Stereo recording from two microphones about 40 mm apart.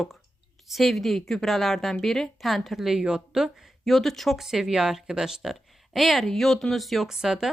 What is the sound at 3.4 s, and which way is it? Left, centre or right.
Speech, centre.